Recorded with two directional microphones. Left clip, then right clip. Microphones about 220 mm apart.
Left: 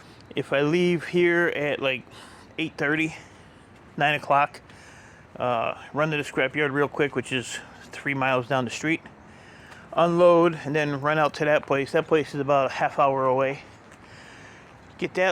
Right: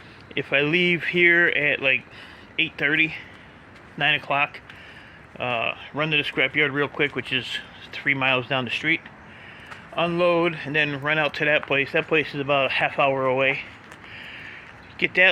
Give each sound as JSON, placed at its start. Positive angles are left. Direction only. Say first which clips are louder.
{"t": 0.3, "sound": "speech", "louder": "right 2 dB", "side_deg": 25}
{"t": 8.0, "sound": "speech", "louder": "right 3 dB", "side_deg": 15}
{"t": 12.8, "sound": "speech", "louder": "even", "side_deg": 5}